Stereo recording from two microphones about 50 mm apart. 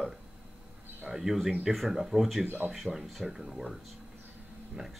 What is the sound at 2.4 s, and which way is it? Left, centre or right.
Speech, right.